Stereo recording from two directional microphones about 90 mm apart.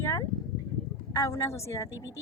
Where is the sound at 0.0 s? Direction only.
25° left (ahead or behind).